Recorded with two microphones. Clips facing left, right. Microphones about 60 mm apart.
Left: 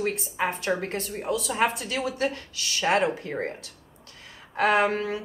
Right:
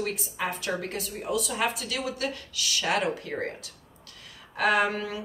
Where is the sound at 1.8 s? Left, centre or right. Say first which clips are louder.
Left 4 dB; left.